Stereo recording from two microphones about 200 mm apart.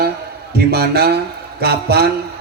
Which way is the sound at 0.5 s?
50° right (ahead or behind).